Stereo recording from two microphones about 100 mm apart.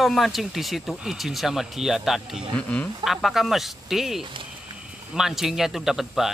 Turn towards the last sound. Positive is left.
turn(degrees=-5)  # may be behind; listen again after turning